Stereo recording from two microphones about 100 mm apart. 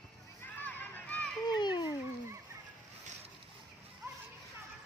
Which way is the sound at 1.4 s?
45° left (ahead or behind).